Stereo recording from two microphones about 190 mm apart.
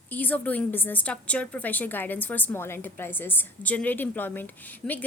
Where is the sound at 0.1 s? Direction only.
10° left (ahead or behind).